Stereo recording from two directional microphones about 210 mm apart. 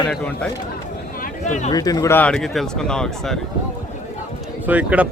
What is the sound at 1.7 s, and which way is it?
Speech, 15° left (ahead or behind).